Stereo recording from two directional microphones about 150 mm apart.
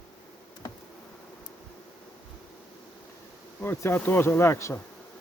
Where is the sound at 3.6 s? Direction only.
15° left (ahead or behind).